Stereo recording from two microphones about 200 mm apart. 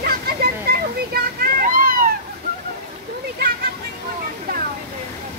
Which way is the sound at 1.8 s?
45° right (ahead or behind).